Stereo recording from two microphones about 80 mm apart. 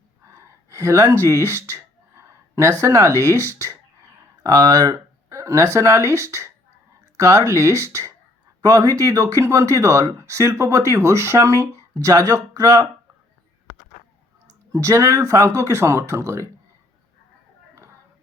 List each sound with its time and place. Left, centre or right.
0.7 s speech: right
14.4 s speech: right